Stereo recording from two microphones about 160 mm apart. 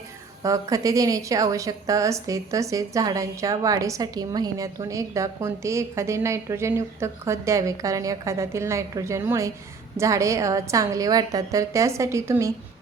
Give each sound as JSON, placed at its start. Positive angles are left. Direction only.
{"t": 0.4, "sound": "a woman's voice", "side_deg": -20}